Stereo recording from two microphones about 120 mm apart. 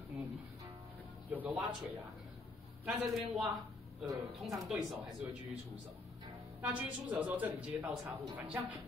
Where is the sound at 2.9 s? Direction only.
Centre (ahead or behind).